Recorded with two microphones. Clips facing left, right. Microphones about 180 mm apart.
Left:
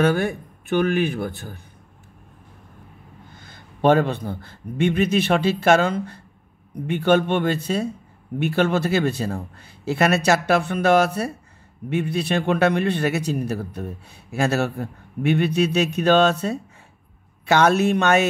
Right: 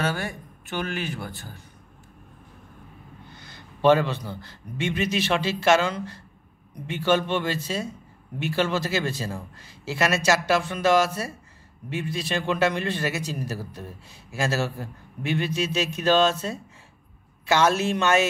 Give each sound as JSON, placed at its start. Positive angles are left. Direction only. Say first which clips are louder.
{"t": 0.0, "sound": "a man's voice", "louder": "left 9 dB", "side_deg": 60}
{"t": 3.3, "sound": "a man's voice", "louder": "left 2 dB", "side_deg": 50}